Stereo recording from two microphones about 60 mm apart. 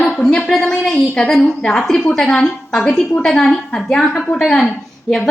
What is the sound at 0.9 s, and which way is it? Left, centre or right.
A woman's voice, centre.